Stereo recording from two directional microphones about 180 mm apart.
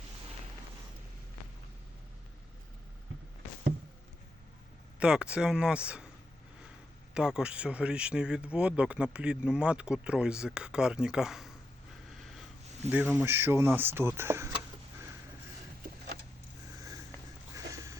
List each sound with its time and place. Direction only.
4.9 s speech: 5° right (ahead or behind)
7.1 s speech: 5° right (ahead or behind)
12.8 s speech: 40° right (ahead or behind)
13.1 s speech: 10° right (ahead or behind)
17.5 s a sound: 20° right (ahead or behind)